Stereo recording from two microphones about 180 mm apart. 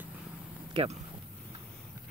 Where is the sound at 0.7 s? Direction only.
35° right (ahead or behind).